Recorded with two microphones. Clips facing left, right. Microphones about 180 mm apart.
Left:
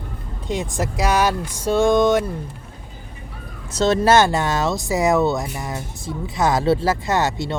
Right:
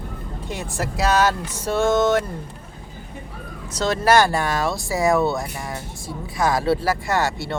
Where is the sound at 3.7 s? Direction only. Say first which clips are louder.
Left 2 dB; 25° left (ahead or behind).